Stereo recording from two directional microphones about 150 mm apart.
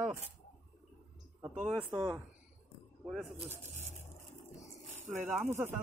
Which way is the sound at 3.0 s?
Centre (ahead or behind).